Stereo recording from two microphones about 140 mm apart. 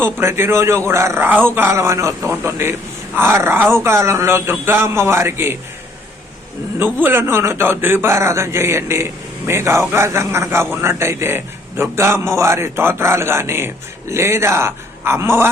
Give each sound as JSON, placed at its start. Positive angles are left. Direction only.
{"t": 0.0, "sound": "a man's voice", "side_deg": -15}
{"t": 6.7, "sound": "a man's voice", "side_deg": -15}